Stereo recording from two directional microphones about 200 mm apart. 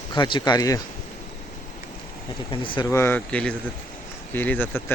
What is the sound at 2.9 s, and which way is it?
Speech, 10° left (ahead or behind).